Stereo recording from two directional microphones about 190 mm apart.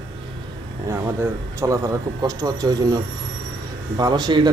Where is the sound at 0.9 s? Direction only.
15° right (ahead or behind).